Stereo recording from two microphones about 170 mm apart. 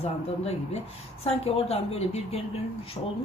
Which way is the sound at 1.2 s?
35° left (ahead or behind).